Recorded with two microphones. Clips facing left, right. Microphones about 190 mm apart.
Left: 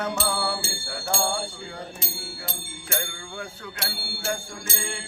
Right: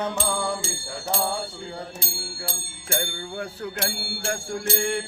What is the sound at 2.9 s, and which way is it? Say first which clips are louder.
Music: right 4 dB; 35° right (ahead or behind).